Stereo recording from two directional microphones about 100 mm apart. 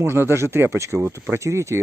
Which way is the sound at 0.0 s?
25° right (ahead or behind).